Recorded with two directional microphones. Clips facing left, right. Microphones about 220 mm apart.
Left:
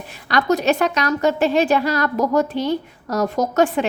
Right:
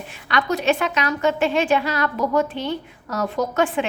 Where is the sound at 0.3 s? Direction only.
40° left (ahead or behind).